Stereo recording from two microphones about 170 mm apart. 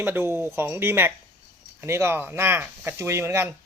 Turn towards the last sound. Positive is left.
turn(degrees=-15)  # may be behind; listen again after turning